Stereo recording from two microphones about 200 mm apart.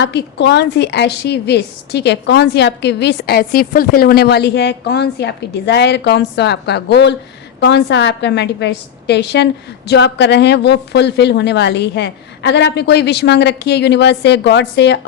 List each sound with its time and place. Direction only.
0.0 s a woman's voice: 60° left (ahead or behind)